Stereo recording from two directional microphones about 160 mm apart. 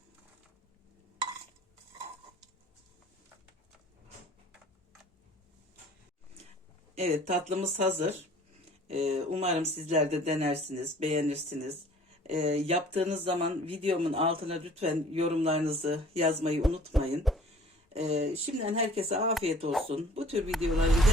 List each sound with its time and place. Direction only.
6.9 s speech: 45° right (ahead or behind)
12.4 s speech: 40° right (ahead or behind)
16.6 s speech: centre (ahead or behind)
17.9 s speech: 40° right (ahead or behind)
20.7 s speech: centre (ahead or behind)